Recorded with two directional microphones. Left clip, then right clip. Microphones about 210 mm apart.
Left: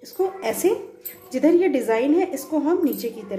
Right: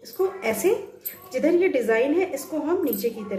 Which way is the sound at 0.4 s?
30° left (ahead or behind).